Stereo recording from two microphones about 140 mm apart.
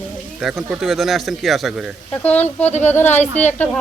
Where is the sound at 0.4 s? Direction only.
Centre (ahead or behind).